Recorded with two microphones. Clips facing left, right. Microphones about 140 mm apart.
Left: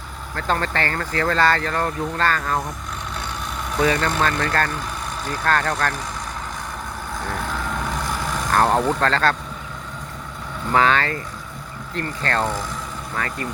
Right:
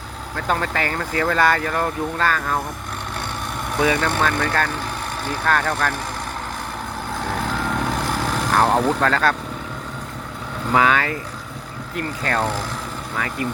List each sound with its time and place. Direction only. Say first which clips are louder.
0.3 s speech: even; 10° right (ahead or behind)
4.2 s speech: even; 5° right (ahead or behind)
7.4 s vehicle: right 3 dB; 70° right (ahead or behind)
8.5 s a sound: even; 10° right (ahead or behind)
9.0 s speech: right 1 dB; 10° right (ahead or behind)
10.7 s speech: even; 10° right (ahead or behind)